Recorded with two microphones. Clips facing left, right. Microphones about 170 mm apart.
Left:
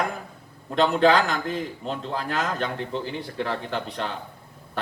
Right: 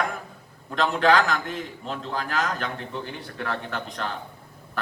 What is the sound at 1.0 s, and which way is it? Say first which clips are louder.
A man's voice: right 1 dB; 30° left (ahead or behind).